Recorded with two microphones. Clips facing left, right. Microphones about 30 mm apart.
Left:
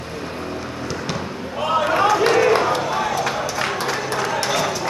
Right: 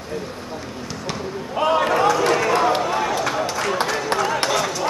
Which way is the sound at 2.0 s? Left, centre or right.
Centre.